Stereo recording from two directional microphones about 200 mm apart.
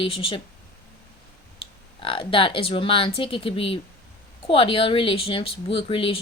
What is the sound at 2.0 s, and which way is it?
Speech, 25° left (ahead or behind).